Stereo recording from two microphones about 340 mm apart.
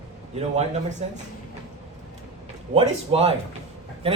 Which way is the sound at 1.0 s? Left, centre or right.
Centre.